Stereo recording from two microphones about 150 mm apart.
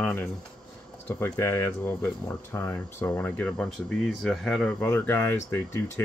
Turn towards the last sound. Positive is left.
turn(degrees=20)  # may be behind; listen again after turning